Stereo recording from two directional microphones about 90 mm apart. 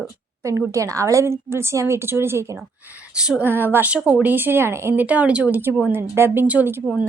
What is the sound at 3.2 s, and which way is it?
Speech, 10° right (ahead or behind).